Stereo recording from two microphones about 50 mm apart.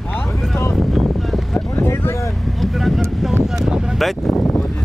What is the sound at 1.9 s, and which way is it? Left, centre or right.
Vehicle, left.